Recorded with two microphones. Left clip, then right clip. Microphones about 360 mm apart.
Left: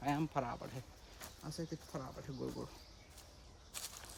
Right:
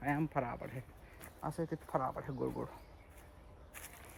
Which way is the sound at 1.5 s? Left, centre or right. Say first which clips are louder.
Right 8 dB; centre.